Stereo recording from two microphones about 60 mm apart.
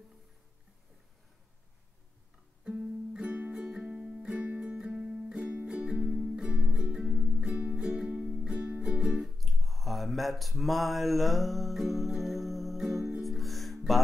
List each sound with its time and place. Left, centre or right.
2.6 s music: centre
4.5 s music: right
4.7 s music: centre
9.4 s a sound: centre
13.2 s music: centre